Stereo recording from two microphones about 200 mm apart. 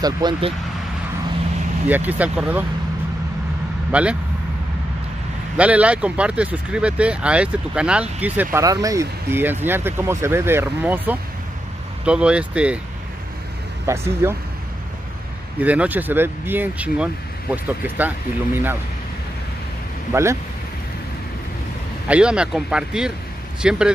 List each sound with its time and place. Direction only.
0.0 s speech: 20° right (ahead or behind)
1.9 s speech: 10° right (ahead or behind)
3.9 s speech: 5° right (ahead or behind)
5.6 s speech: 5° right (ahead or behind)
13.8 s speech: 15° right (ahead or behind)
15.6 s speech: 5° right (ahead or behind)
20.1 s speech: 15° right (ahead or behind)
22.0 s speech: 5° right (ahead or behind)